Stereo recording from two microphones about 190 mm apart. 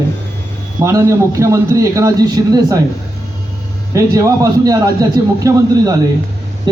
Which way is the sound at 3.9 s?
15° right (ahead or behind).